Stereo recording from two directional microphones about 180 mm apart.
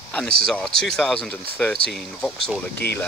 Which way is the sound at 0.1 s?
5° left (ahead or behind).